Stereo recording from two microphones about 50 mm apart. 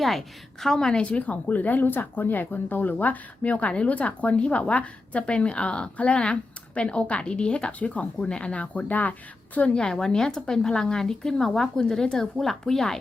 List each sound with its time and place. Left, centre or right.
0.0 s a woman's voice: centre
1.0 s speech: left
9.7 s speech: centre